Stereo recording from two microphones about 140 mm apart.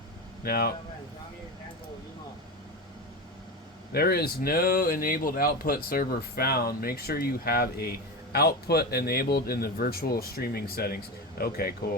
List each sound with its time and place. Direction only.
0.4 s speech: 90° left
3.9 s speech: 90° left